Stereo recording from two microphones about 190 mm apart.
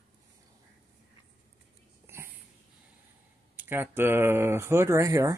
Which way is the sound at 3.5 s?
10° right (ahead or behind).